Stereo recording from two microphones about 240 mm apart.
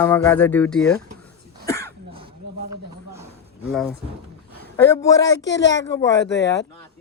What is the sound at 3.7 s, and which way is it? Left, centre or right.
Speech, centre.